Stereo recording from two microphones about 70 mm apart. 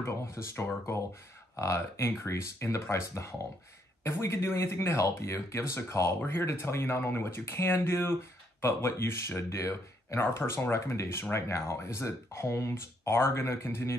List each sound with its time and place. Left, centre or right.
0.0 s speech: left